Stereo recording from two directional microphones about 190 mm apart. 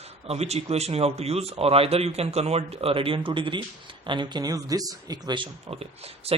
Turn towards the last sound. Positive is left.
turn(degrees=-30)  # may be behind; listen again after turning